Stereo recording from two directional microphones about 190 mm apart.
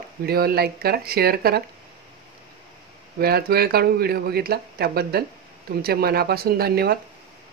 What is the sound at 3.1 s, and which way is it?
Speech, 55° right (ahead or behind).